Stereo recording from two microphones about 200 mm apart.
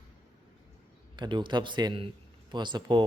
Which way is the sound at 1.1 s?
20° right (ahead or behind).